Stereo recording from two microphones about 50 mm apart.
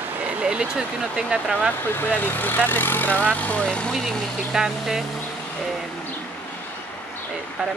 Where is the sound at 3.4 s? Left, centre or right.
Left.